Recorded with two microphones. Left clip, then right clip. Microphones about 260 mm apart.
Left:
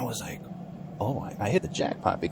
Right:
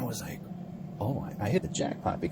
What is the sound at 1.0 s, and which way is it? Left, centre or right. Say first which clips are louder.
Speech: left 4 dB; left.